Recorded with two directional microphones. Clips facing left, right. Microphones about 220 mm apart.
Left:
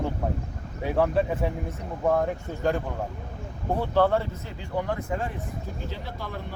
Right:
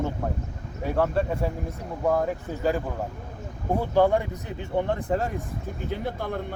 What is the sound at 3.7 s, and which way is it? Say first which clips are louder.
Speech: right 2 dB; 15° right (ahead or behind).